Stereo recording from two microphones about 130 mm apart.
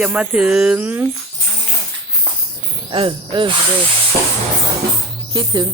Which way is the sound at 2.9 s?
40° right (ahead or behind).